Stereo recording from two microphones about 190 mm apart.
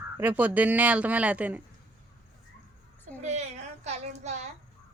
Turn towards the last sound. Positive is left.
turn(degrees=-35)  # may be behind; listen again after turning